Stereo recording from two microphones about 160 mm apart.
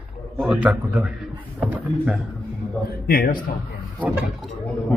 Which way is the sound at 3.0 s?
65° left (ahead or behind).